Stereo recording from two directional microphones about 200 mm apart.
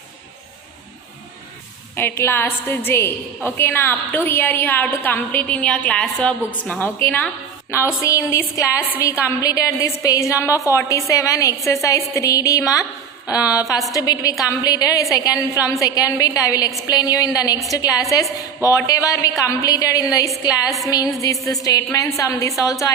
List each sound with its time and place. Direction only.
2.0 s a woman's voice: 10° left (ahead or behind)
13.2 s a woman's voice: 5° right (ahead or behind)
13.5 s a woman's voice: 15° left (ahead or behind)